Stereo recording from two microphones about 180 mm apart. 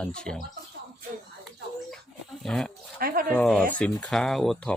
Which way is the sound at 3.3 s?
5° left (ahead or behind).